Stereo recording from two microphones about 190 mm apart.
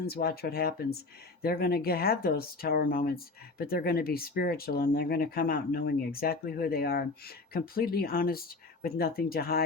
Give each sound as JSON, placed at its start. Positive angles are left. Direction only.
{"t": 0.0, "sound": "speech", "side_deg": 55}